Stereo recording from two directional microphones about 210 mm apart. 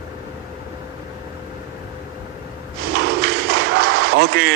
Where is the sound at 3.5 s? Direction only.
50° right (ahead or behind).